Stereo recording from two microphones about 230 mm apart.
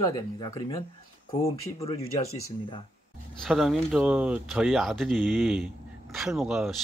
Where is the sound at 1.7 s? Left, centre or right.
Left.